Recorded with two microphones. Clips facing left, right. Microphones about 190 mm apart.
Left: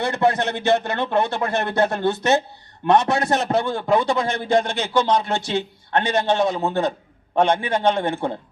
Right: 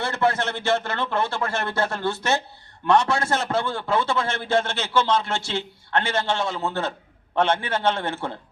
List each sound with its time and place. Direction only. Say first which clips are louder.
0.0 s a man's voice: left 3 dB; 15° left (ahead or behind)